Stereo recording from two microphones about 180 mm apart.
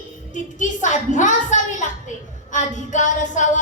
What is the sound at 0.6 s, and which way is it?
Music, 45° left (ahead or behind).